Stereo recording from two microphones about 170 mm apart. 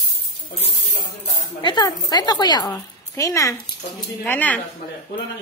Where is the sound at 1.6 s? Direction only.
25° left (ahead or behind).